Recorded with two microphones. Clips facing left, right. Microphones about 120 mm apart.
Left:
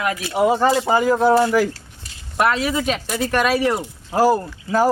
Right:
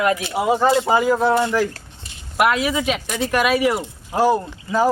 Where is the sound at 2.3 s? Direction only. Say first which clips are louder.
Right 1 dB; 10° right (ahead or behind).